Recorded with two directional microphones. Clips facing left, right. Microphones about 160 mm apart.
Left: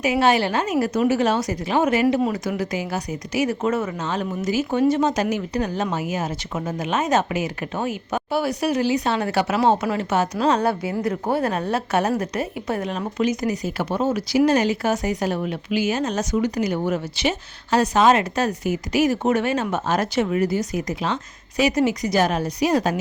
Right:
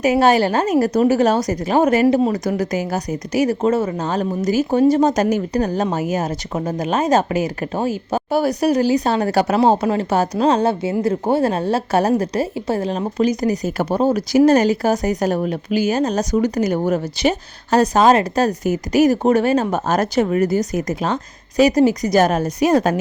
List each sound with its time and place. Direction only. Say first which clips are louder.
0.0 s speech: right 4 dB; 40° right (ahead or behind)